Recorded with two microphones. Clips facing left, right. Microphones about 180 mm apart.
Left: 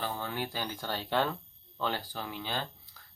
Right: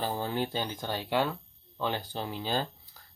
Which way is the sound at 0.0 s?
35° right (ahead or behind).